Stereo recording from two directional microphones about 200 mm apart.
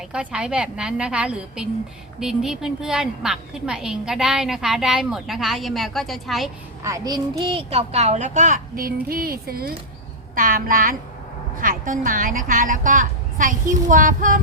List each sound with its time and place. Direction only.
0.1 s a woman's voice: 5° right (ahead or behind)
6.8 s a child's voice: 15° right (ahead or behind); by 14.3 s 40° right (ahead or behind)